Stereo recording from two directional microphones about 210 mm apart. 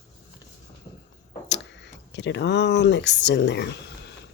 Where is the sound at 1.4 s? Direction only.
55° left (ahead or behind).